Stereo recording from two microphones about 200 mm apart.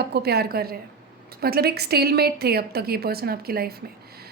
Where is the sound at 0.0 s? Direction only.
55° right (ahead or behind).